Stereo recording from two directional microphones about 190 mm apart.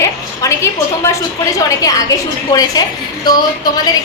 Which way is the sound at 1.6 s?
20° left (ahead or behind).